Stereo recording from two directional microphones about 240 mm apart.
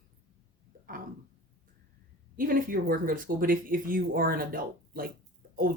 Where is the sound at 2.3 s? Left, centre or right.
Right.